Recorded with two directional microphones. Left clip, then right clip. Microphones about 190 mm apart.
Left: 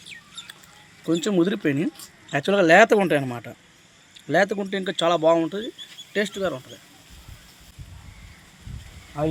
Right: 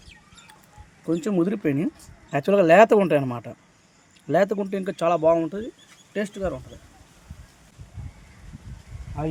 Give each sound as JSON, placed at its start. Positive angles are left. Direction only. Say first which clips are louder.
{"t": 1.0, "sound": "speech", "louder": "left 2 dB", "side_deg": -10}
{"t": 2.3, "sound": "speech", "louder": "even", "side_deg": -30}